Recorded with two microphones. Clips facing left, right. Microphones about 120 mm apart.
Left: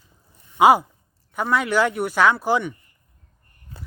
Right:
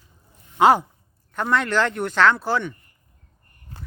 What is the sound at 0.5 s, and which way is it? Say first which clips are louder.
Speech: left 1 dB; 10° left (ahead or behind).